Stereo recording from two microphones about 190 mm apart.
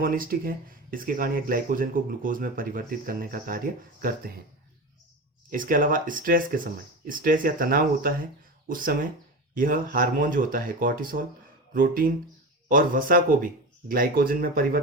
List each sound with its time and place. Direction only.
0.0 s speech: 50° right (ahead or behind)
5.5 s speech: 45° right (ahead or behind)